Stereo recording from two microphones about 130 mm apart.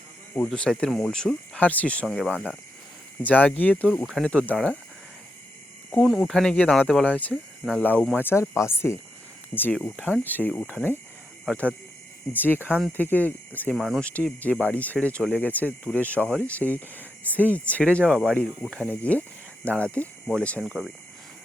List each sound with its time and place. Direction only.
0.4 s speech: 5° left (ahead or behind)
2.0 s speech: centre (ahead or behind)
3.8 s speech: centre (ahead or behind)
5.9 s speech: centre (ahead or behind)
12.3 s speech: 15° left (ahead or behind)
13.7 s speech: centre (ahead or behind)
14.6 s speech: 10° left (ahead or behind)
18.9 s speech: 10° left (ahead or behind)